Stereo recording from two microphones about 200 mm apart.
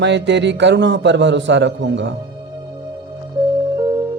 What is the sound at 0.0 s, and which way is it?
Speech, 60° right (ahead or behind).